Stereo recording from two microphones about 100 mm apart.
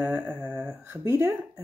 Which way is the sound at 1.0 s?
30° right (ahead or behind).